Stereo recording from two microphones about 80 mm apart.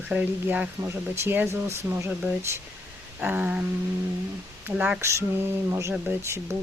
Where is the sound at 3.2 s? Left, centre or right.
Centre.